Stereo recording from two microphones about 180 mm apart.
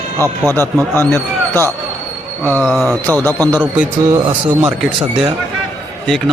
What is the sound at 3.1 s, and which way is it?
Speech, 20° right (ahead or behind).